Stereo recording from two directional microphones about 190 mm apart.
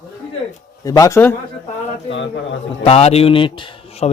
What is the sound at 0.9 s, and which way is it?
Speech, 20° left (ahead or behind).